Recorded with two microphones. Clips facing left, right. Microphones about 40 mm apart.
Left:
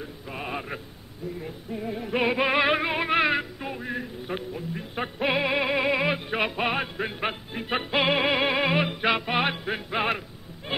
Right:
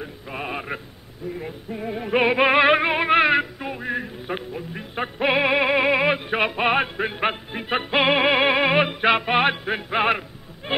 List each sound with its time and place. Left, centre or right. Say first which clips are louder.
0.0 s mantra: right 4 dB; centre
1.4 s music: right 3 dB; right